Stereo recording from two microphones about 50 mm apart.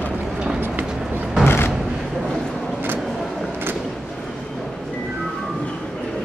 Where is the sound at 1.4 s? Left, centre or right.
Left.